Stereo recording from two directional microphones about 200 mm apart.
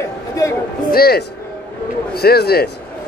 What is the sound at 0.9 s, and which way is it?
A man's voice, 50° left (ahead or behind).